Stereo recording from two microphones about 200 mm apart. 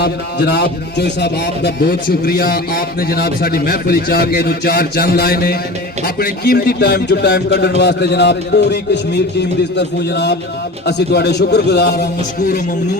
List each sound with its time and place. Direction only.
0.0 s a man's voice: 55° left (ahead or behind)